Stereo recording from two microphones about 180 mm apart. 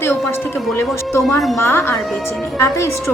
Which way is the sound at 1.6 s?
15° left (ahead or behind).